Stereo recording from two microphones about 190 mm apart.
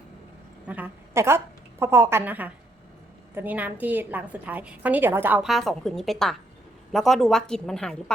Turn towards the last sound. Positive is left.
turn(degrees=5)  # may be behind; listen again after turning